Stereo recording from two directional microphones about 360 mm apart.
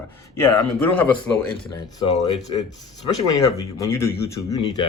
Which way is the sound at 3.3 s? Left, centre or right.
Centre.